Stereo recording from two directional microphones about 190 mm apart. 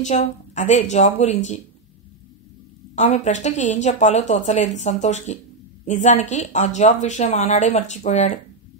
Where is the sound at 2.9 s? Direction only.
35° left (ahead or behind).